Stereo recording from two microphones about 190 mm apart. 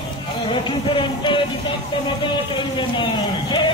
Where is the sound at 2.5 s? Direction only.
25° left (ahead or behind).